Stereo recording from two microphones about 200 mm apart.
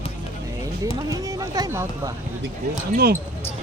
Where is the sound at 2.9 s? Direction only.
50° right (ahead or behind).